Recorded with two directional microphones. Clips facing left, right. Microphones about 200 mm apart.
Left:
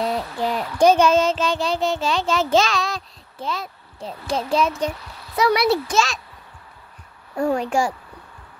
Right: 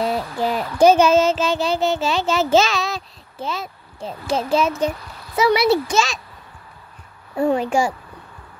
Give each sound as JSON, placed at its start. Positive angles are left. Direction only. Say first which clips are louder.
{"t": 0.0, "sound": "child singing", "louder": "right 2 dB", "side_deg": -5}
{"t": 4.3, "sound": "a child's voice", "louder": "right 2 dB", "side_deg": 0}
{"t": 7.3, "sound": "a child's voice", "louder": "right 2 dB", "side_deg": -5}